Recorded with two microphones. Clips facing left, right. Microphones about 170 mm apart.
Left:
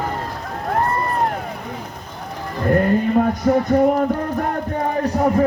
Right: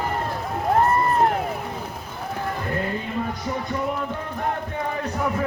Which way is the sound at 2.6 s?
50° left (ahead or behind).